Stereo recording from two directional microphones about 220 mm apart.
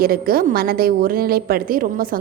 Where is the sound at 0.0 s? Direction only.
40° right (ahead or behind).